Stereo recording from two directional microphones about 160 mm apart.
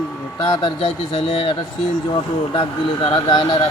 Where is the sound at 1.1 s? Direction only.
35° left (ahead or behind).